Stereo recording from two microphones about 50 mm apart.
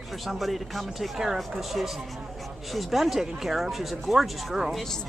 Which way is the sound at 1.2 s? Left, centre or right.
Centre.